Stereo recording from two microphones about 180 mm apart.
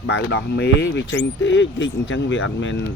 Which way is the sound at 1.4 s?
90° left.